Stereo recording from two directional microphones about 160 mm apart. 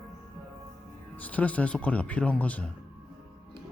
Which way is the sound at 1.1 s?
10° left (ahead or behind).